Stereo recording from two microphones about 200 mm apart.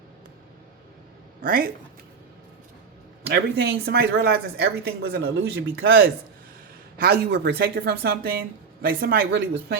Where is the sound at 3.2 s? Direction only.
50° right (ahead or behind).